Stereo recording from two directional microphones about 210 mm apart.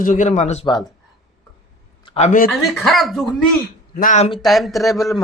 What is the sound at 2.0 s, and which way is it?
Speech, 30° left (ahead or behind).